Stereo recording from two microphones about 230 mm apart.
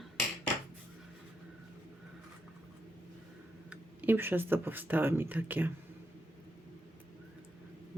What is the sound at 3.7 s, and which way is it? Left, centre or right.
Speech, centre.